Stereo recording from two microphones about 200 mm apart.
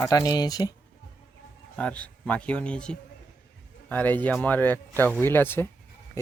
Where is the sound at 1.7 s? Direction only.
5° left (ahead or behind).